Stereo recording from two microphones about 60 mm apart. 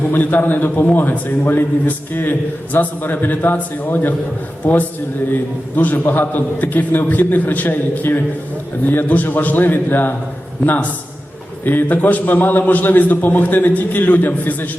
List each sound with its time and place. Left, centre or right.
0.1 s a man's voice: left
11.6 s a man's voice: left